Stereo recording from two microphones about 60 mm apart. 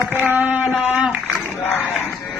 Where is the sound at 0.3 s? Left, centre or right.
Right.